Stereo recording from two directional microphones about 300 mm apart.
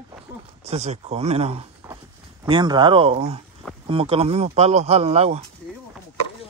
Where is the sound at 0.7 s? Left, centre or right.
Right.